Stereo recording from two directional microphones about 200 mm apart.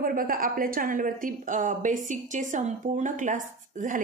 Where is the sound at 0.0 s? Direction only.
45° right (ahead or behind).